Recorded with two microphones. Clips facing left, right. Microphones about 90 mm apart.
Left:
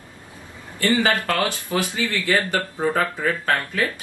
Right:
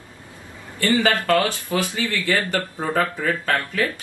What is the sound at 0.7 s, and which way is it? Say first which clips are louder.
Speech: even; 25° left (ahead or behind).